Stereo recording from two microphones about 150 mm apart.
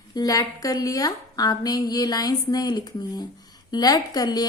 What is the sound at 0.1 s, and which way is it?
A woman's voice, 25° left (ahead or behind).